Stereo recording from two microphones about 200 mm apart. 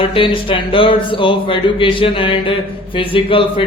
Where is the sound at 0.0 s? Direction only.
25° left (ahead or behind).